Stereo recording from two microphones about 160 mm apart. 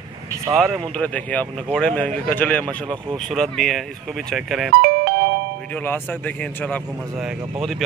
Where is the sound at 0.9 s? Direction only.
10° left (ahead or behind).